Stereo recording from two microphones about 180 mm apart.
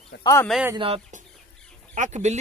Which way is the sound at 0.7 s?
30° right (ahead or behind).